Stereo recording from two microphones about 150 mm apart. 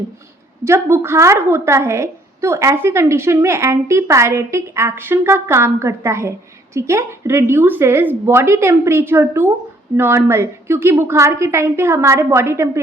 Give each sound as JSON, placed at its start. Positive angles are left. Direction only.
{"t": 0.6, "sound": "a woman's voice", "side_deg": -15}